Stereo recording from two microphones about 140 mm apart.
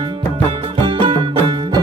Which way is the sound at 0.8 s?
35° right (ahead or behind).